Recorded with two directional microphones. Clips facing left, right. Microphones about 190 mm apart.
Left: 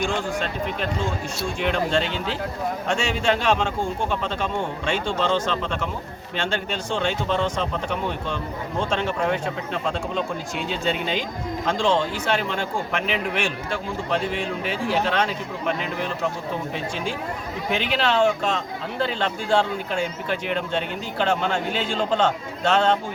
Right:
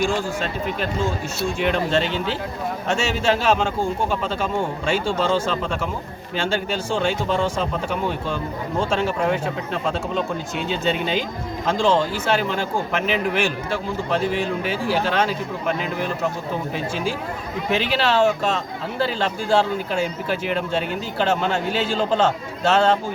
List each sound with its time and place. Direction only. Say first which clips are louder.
0.0 s speech: right 2 dB; 5° right (ahead or behind)
10.7 s speech: right 3 dB; centre (ahead or behind)